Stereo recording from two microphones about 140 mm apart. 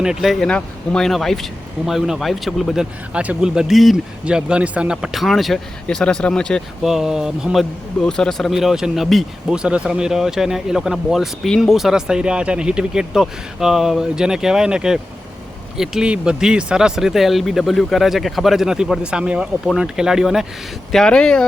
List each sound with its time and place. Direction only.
0.0 s speech: 5° right (ahead or behind)